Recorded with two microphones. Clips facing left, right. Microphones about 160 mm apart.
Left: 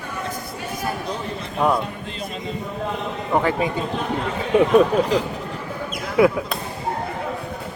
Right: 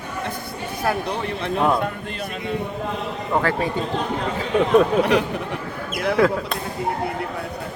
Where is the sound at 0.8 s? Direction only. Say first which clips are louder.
Right 5 dB; 65° right (ahead or behind).